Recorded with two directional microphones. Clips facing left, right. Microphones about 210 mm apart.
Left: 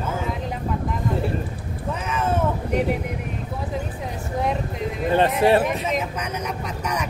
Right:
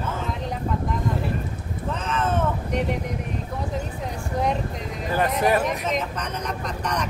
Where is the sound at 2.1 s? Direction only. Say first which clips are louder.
Left 1 dB; 10° left (ahead or behind).